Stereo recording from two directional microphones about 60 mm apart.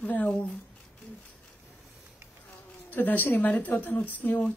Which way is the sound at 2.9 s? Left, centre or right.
Left.